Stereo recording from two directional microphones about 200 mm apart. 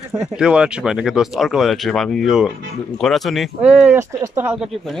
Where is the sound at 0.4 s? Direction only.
5° right (ahead or behind).